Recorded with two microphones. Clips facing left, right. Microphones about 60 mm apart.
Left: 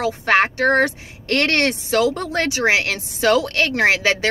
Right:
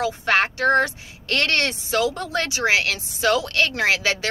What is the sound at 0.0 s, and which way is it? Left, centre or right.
Speech, left.